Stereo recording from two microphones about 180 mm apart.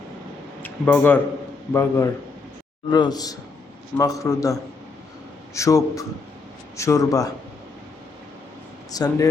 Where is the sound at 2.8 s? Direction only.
25° left (ahead or behind).